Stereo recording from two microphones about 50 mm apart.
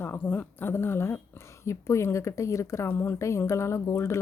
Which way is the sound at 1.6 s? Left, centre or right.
Left.